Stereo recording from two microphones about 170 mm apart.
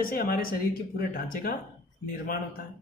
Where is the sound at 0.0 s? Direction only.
60° left (ahead or behind).